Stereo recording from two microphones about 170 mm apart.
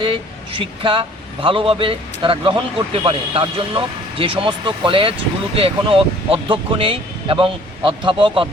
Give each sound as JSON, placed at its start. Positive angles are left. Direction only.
{"t": 0.0, "sound": "speech", "side_deg": -30}